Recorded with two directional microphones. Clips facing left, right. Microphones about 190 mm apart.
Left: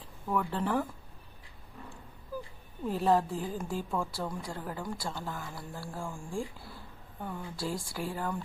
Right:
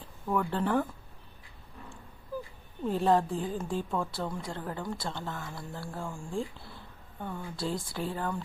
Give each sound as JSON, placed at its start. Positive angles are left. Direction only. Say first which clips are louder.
{"t": 0.0, "sound": "speech", "louder": "right 2 dB", "side_deg": 0}
{"t": 2.8, "sound": "a woman's voice", "louder": "right 1 dB", "side_deg": 5}